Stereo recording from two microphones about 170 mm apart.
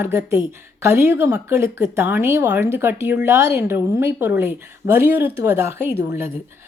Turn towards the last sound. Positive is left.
turn(degrees=-15)  # may be behind; listen again after turning